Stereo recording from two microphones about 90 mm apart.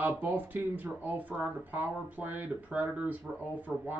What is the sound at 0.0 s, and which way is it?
Speech, 20° right (ahead or behind).